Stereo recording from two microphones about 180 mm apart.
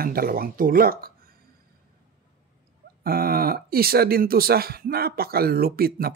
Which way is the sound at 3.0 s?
55° right (ahead or behind).